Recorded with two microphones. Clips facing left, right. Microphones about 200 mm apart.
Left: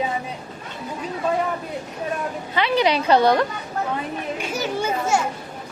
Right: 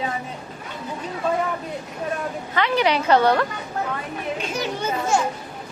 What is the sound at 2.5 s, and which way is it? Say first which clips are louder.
Speech: left 1 dB; 15° left (ahead or behind).